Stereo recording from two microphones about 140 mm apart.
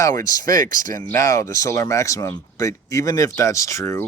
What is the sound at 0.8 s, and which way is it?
Speech, 70° right (ahead or behind).